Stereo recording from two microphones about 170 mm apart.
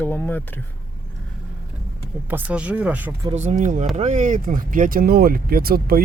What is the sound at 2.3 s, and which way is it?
Speech, 10° right (ahead or behind).